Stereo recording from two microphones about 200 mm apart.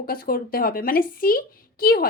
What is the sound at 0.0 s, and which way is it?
A woman's voice, 45° left (ahead or behind).